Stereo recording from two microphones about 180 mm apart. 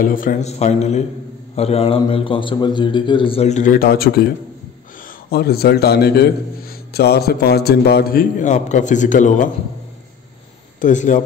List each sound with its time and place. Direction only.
0.0 s a man's voice: 50° left (ahead or behind)
5.3 s a man's voice: 60° left (ahead or behind); by 9.5 s 45° left (ahead or behind)
10.8 s speech: 45° left (ahead or behind)